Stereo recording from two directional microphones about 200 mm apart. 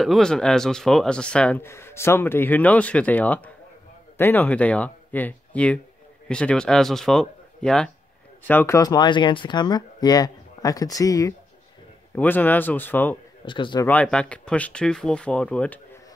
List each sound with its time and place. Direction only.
0.0 s speech: centre (ahead or behind)
13.5 s speech: 25° left (ahead or behind)
13.8 s speech: 5° left (ahead or behind)